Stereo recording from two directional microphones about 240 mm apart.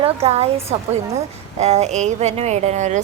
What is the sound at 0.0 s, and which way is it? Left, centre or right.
Speech, right.